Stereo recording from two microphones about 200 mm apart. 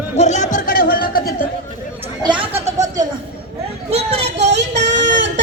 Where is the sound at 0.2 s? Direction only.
35° left (ahead or behind).